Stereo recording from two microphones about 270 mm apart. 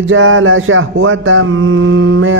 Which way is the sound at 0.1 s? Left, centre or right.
Right.